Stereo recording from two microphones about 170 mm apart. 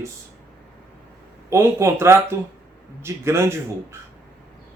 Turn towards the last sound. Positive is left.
turn(degrees=-15)  # may be behind; listen again after turning